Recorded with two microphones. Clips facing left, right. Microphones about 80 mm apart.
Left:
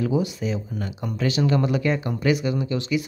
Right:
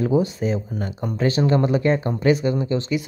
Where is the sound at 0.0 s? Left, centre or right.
Right.